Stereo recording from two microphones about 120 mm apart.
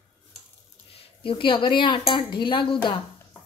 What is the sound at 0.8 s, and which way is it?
A woman's voice, 50° left (ahead or behind).